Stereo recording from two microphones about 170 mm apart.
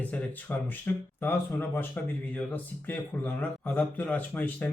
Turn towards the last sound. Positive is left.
turn(degrees=10)  # may be behind; listen again after turning